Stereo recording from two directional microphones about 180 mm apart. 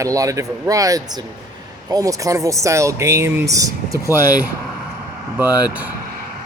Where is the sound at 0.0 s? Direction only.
20° right (ahead or behind).